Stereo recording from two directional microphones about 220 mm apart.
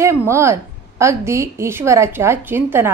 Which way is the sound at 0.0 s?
10° right (ahead or behind).